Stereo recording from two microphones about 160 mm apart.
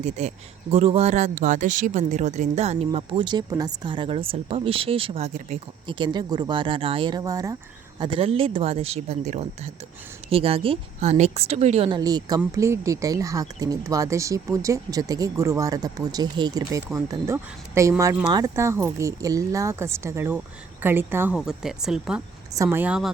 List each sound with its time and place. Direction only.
0.0 s speech: 45° right (ahead or behind)
11.9 s speech: 25° right (ahead or behind); by 22.2 s 5° right (ahead or behind)
22.5 s speech: 15° right (ahead or behind)